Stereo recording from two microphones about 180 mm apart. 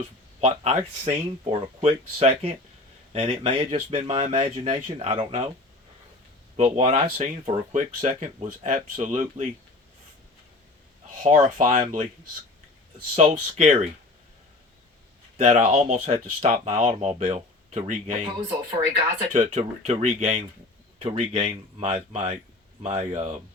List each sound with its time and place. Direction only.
0.4 s speech: 35° right (ahead or behind)
6.7 s speech: 35° right (ahead or behind)
11.2 s speech: 45° right (ahead or behind)
13.1 s speech: 35° right (ahead or behind)
15.4 s speech: 35° right (ahead or behind)
19.3 s speech: 40° right (ahead or behind)